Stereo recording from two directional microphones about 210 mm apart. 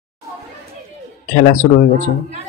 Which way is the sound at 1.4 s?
35° left (ahead or behind).